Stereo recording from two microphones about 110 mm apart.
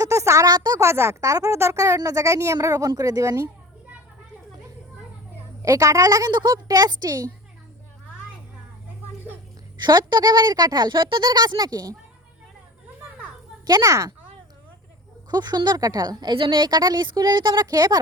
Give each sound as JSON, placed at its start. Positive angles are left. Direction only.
{"t": 0.0, "sound": "speech", "side_deg": -25}
{"t": 0.8, "sound": "speech", "side_deg": -25}
{"t": 5.6, "sound": "speech", "side_deg": -30}
{"t": 9.7, "sound": "speech", "side_deg": -40}
{"t": 13.7, "sound": "speech", "side_deg": -35}
{"t": 15.3, "sound": "speech", "side_deg": -40}